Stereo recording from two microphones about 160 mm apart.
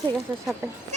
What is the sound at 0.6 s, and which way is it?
Speech, 20° right (ahead or behind).